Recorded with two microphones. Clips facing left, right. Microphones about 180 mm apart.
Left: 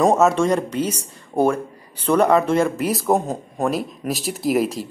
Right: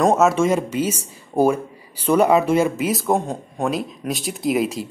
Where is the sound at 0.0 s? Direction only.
Centre (ahead or behind).